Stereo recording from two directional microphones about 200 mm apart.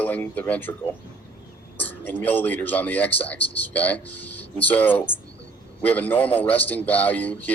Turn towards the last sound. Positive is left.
turn(degrees=10)  # may be behind; listen again after turning